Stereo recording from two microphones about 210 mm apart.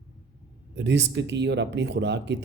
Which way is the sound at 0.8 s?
55° right (ahead or behind).